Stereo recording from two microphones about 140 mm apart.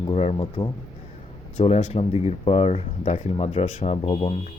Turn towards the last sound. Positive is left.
turn(degrees=45)  # may be behind; listen again after turning